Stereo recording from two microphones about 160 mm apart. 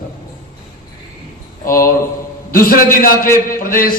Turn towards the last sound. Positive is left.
turn(degrees=60)  # may be behind; listen again after turning